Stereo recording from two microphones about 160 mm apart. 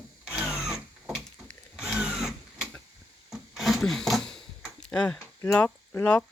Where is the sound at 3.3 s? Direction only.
Centre (ahead or behind).